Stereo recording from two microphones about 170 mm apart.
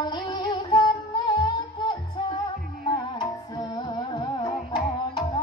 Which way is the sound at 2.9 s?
25° left (ahead or behind).